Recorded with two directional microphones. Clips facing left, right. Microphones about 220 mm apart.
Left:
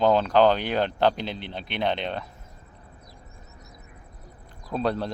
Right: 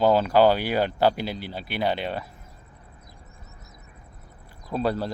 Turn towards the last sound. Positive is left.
turn(degrees=-5)  # may be behind; listen again after turning